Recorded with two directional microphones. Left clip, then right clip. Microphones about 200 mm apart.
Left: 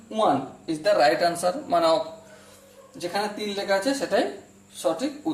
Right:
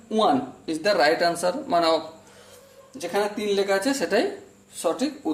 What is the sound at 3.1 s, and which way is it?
Speech, 35° right (ahead or behind).